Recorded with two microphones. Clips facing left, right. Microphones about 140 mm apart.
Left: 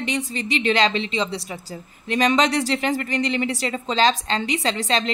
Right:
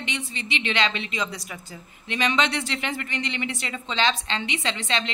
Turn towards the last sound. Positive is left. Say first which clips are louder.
# left 5 dB
turn(degrees=40)  # may be behind; listen again after turning